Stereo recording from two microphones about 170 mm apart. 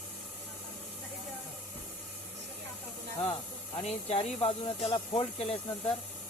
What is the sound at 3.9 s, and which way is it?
Speech, 40° left (ahead or behind).